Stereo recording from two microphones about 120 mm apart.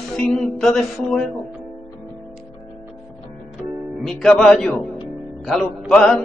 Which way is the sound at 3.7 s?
20° right (ahead or behind).